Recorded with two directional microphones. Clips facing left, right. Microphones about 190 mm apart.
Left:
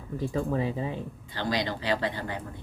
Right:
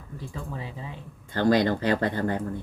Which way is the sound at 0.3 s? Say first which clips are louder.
Left 9 dB; 50° left (ahead or behind).